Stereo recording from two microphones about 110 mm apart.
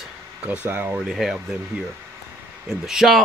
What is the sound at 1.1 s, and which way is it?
Speech, centre (ahead or behind).